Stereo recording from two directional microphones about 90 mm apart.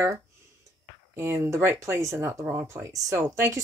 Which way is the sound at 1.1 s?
30° right (ahead or behind).